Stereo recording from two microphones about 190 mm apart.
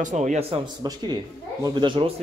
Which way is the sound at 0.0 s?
40° right (ahead or behind).